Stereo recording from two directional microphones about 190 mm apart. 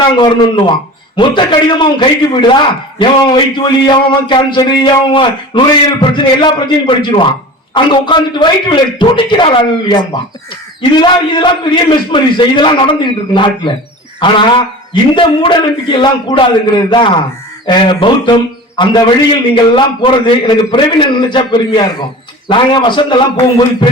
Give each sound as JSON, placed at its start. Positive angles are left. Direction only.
{"t": 0.2, "sound": "a man's voice", "side_deg": 25}